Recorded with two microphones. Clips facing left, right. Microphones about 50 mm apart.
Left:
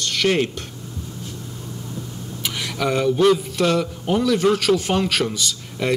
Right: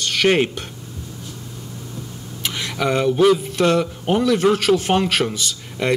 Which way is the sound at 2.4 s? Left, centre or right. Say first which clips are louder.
Right 2 dB; centre.